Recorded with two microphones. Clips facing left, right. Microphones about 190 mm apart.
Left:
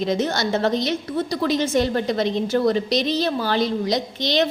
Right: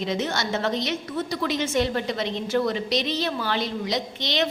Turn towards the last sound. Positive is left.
turn(degrees=40)  # may be behind; listen again after turning